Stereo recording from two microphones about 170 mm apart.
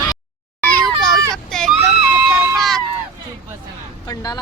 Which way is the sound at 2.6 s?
Centre (ahead or behind).